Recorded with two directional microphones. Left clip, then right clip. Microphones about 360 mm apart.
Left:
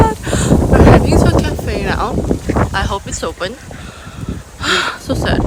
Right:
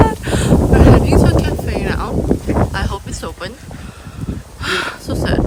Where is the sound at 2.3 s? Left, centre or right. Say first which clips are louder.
Right 1 dB; left.